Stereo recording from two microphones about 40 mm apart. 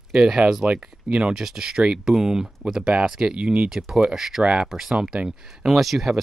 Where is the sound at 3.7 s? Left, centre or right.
Centre.